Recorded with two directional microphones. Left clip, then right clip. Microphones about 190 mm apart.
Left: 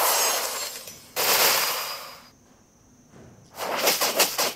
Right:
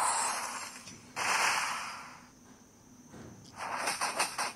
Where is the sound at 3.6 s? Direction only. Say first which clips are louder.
Left 10 dB; 5° left (ahead or behind).